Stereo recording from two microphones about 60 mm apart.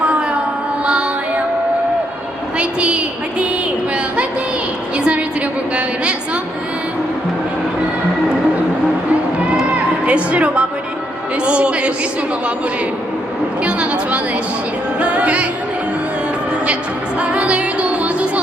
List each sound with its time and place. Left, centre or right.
2.6 s a woman's voice: centre
4.9 s a woman's voice: centre
9.7 s music: right
13.7 s a woman's voice: centre
14.9 s music: centre
17.2 s music: centre